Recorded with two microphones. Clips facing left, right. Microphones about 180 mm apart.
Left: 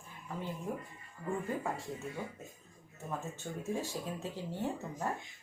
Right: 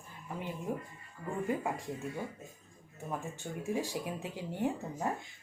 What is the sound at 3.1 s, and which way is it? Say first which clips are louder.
Speech: right 1 dB; 15° right (ahead or behind).